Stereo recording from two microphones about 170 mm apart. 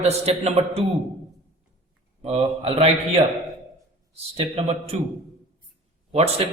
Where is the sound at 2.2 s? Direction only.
35° right (ahead or behind).